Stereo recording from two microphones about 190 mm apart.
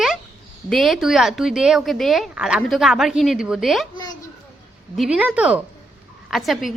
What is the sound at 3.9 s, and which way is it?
Speech, 20° left (ahead or behind).